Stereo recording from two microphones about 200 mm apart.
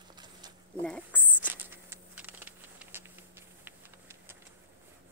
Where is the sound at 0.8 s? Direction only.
5° left (ahead or behind).